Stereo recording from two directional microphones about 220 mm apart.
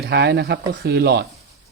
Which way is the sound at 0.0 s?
50° right (ahead or behind).